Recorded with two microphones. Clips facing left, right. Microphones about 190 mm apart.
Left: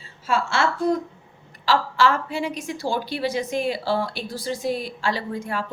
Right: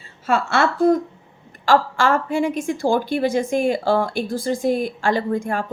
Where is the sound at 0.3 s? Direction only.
55° right (ahead or behind).